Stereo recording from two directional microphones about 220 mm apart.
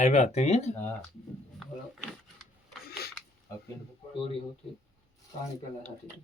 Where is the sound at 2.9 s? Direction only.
45° left (ahead or behind).